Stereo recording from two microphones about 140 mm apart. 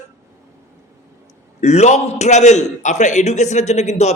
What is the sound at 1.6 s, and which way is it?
A man's voice, 55° left (ahead or behind).